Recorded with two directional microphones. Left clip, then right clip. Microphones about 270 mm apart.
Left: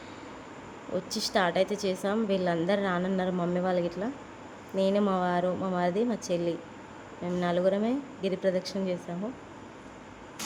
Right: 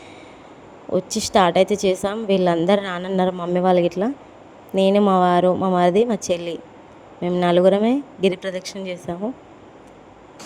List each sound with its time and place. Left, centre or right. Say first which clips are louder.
0.9 s a woman's voice: right 11 dB; right